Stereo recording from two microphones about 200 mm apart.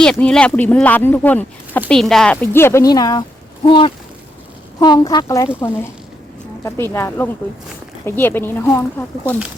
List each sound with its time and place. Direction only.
0.0 s a woman's voice: 5° left (ahead or behind)
6.7 s a woman's voice: 15° left (ahead or behind)